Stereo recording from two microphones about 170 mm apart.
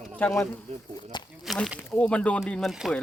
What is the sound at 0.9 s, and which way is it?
Speech, 25° left (ahead or behind).